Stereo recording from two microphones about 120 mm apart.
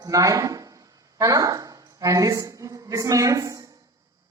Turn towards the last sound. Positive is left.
turn(degrees=-30)  # may be behind; listen again after turning